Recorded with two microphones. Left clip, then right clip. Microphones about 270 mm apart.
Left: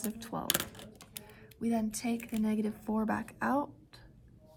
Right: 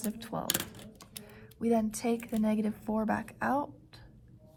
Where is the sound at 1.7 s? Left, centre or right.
Centre.